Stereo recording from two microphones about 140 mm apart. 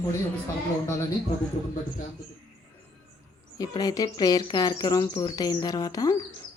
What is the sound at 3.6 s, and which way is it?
Speech, 25° left (ahead or behind).